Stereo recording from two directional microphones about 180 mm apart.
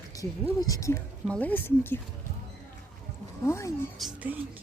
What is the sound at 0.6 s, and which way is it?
A woman's voice, 20° left (ahead or behind).